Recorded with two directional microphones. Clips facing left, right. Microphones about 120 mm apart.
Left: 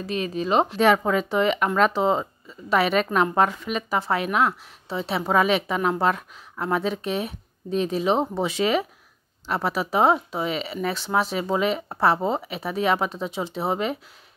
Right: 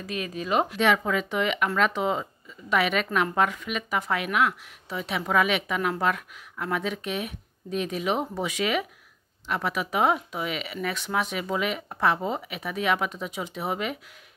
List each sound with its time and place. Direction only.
0.0 s speech: 30° left (ahead or behind)